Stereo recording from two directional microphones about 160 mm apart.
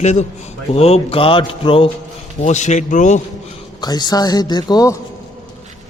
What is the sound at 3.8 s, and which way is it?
Speech, 25° left (ahead or behind).